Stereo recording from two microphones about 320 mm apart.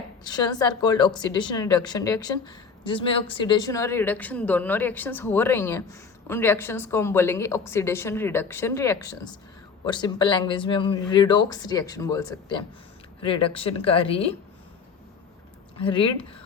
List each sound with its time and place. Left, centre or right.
0.3 s a woman's voice: centre
15.8 s a woman's voice: centre